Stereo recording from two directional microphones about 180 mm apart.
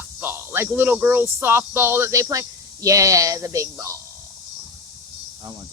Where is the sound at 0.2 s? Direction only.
15° right (ahead or behind).